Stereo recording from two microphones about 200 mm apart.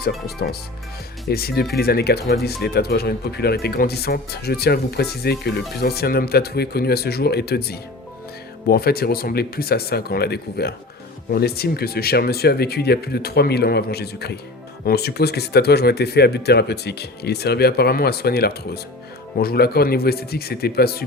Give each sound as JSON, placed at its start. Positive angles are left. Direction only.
{"t": 0.3, "sound": "speech", "side_deg": 50}